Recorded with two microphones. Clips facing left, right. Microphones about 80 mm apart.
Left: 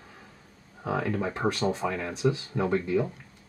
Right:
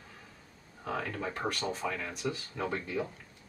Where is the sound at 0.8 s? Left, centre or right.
Centre.